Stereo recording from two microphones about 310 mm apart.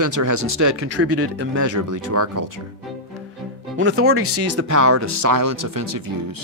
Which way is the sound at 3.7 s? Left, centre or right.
Right.